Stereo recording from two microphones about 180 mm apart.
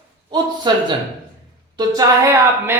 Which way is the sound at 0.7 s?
25° right (ahead or behind).